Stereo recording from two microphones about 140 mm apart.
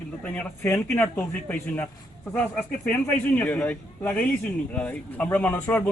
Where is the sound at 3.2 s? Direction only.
10° left (ahead or behind).